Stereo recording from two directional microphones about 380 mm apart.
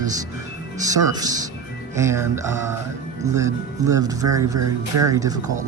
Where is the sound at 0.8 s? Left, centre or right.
Centre.